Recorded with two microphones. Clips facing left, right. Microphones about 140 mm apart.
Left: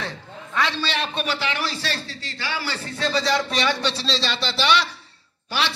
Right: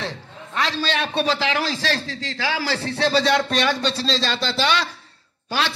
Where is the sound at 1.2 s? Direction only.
90° right; by 4.2 s 45° right (ahead or behind).